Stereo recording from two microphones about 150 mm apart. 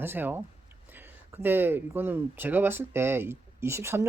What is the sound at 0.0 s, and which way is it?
Speech, 15° right (ahead or behind).